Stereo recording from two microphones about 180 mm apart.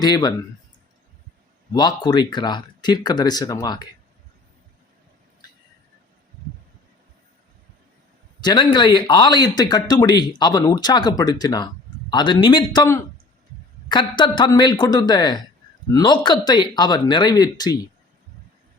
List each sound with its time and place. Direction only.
0.0 s speech: 20° left (ahead or behind)
1.7 s speech: 25° left (ahead or behind)
8.4 s speech: 25° left (ahead or behind)